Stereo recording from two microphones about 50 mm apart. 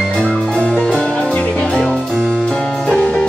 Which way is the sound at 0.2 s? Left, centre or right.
Centre.